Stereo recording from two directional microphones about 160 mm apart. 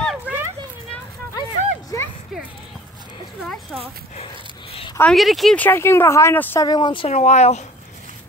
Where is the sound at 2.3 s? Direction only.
5° right (ahead or behind).